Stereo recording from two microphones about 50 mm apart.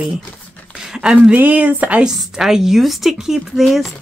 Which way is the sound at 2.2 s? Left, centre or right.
Centre.